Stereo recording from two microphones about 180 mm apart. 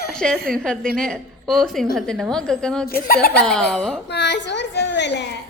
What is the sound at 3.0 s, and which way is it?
Speech, 60° left (ahead or behind).